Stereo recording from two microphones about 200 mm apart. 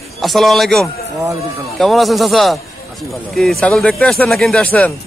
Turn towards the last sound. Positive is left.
turn(degrees=5)  # may be behind; listen again after turning